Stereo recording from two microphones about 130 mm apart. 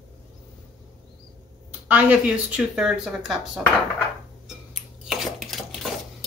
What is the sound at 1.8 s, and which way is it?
Speech, 10° right (ahead or behind).